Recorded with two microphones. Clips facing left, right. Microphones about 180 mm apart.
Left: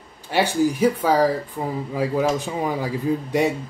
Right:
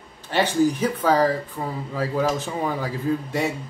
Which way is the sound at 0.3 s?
10° left (ahead or behind).